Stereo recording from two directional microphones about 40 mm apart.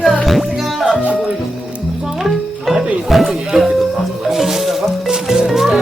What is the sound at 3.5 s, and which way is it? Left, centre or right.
Music, centre.